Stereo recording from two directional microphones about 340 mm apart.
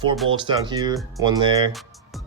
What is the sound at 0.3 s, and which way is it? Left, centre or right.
Speech, centre.